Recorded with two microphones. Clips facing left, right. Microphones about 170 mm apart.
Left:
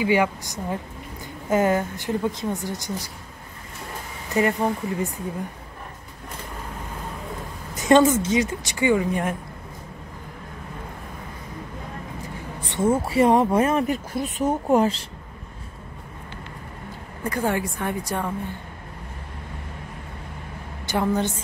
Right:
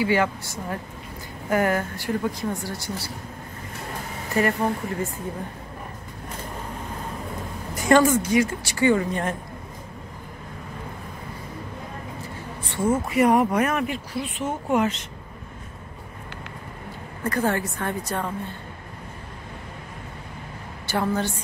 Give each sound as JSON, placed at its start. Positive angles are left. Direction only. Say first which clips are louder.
{"t": 0.0, "sound": "a woman's voice", "louder": "left 1 dB", "side_deg": 15}
{"t": 4.3, "sound": "a woman's voice", "louder": "left 1 dB", "side_deg": 20}
{"t": 7.7, "sound": "a woman's voice", "louder": "left 1 dB", "side_deg": 20}
{"t": 12.6, "sound": "a woman's voice", "louder": "left 2 dB", "side_deg": 25}
{"t": 13.8, "sound": "speech", "louder": "left 3 dB", "side_deg": 45}
{"t": 17.2, "sound": "a woman's voice", "louder": "even", "side_deg": 15}
{"t": 20.8, "sound": "a woman's voice", "louder": "left 2 dB", "side_deg": 15}